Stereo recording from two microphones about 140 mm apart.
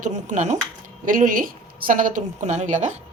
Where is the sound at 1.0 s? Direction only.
75° right (ahead or behind).